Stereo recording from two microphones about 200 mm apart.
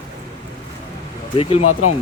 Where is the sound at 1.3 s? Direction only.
25° left (ahead or behind).